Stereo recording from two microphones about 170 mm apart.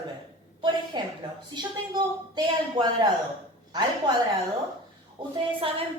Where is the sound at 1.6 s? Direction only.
25° right (ahead or behind).